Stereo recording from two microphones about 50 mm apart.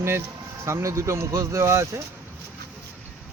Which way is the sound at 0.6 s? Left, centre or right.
Right.